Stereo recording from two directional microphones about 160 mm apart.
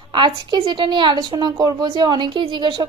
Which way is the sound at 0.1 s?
30° right (ahead or behind).